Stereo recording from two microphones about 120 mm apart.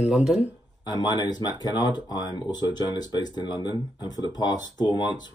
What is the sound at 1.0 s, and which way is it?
Speech, 35° left (ahead or behind).